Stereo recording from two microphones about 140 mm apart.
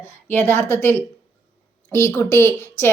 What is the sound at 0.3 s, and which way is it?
A woman's voice, 15° left (ahead or behind).